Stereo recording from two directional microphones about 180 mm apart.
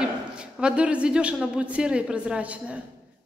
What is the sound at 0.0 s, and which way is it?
A woman's voice, 5° right (ahead or behind).